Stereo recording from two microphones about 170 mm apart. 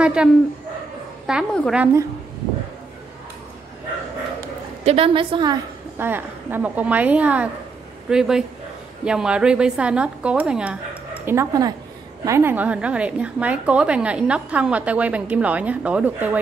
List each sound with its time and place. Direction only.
0.0 s a woman's voice: 5° right (ahead or behind)
4.8 s a woman's voice: 35° right (ahead or behind)
5.9 s a woman's voice: 10° right (ahead or behind)
11.2 s a woman's voice: 20° right (ahead or behind)